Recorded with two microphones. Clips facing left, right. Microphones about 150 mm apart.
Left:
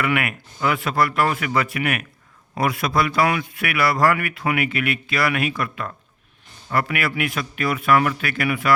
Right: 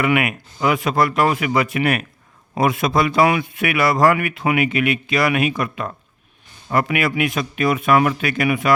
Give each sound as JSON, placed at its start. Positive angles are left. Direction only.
{"t": 0.0, "sound": "speech", "side_deg": -20}
{"t": 1.8, "sound": "speech", "side_deg": -35}
{"t": 2.6, "sound": "speech", "side_deg": -20}